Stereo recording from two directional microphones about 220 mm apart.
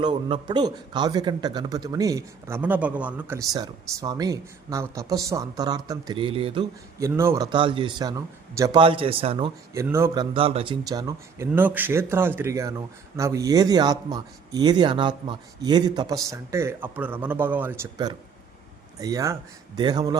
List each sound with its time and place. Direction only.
0.0 s a man's voice: 20° right (ahead or behind)
9.7 s a man's voice: 15° right (ahead or behind)
10.3 s a man's voice: 25° right (ahead or behind); by 17.8 s 10° right (ahead or behind)
17.9 s a man's voice: 20° right (ahead or behind)